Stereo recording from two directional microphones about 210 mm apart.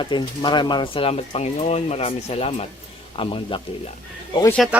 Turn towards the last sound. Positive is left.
turn(degrees=20)  # may be behind; listen again after turning